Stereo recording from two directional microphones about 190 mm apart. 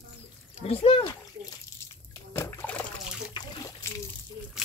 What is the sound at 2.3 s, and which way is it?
Splash, 10° left (ahead or behind).